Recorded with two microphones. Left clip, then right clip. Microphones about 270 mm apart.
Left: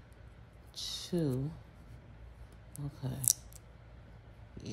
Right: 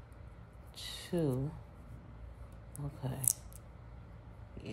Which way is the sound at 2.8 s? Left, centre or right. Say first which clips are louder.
Even; left.